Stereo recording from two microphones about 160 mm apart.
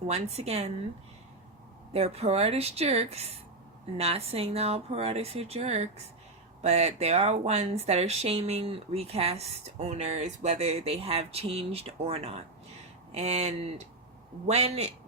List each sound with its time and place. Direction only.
0.1 s a woman's voice: 40° right (ahead or behind)
1.9 s speech: 40° right (ahead or behind)